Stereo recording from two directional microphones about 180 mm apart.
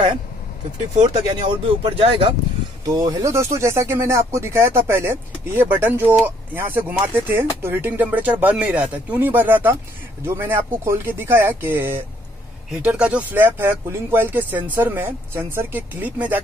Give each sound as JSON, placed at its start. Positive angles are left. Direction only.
{"t": 1.3, "sound": "speech", "side_deg": -30}